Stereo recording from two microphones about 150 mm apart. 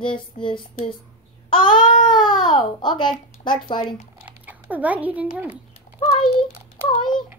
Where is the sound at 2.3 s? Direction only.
30° left (ahead or behind).